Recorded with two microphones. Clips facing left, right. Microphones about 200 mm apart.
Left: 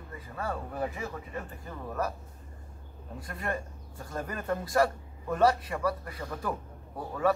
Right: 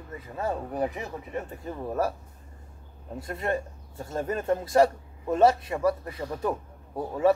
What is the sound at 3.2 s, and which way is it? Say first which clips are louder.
A man's voice: right 6 dB; 25° right (ahead or behind).